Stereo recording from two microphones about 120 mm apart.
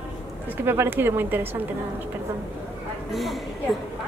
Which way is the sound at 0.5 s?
20° right (ahead or behind).